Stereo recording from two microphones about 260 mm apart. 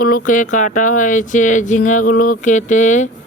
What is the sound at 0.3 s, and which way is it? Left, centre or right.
Speech, left.